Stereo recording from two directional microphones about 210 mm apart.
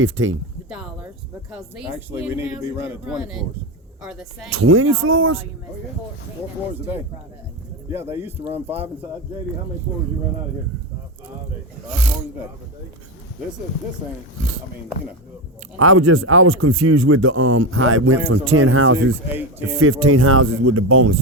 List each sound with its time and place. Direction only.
0.0 s speech: 65° right (ahead or behind)
1.5 s speech: 5° right (ahead or behind)
4.4 s speech: 80° right
7.9 s speech: 10° right (ahead or behind)
15.8 s speech: 85° right
19.3 s speech: 10° right (ahead or behind)
19.8 s speech: 80° right